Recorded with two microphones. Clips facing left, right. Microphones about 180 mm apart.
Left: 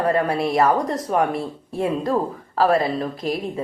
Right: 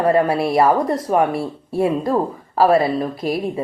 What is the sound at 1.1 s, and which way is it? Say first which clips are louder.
Speech: right 3 dB; 5° right (ahead or behind).